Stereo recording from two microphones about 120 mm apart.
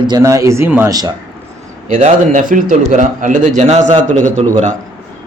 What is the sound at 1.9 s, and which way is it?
A man's voice, 80° right.